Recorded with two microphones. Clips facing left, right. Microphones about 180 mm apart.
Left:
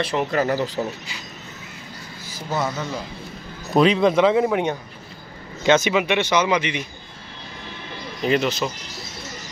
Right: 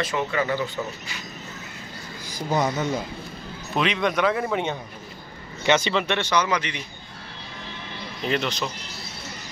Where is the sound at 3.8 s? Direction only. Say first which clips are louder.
Left 7 dB; 30° left (ahead or behind).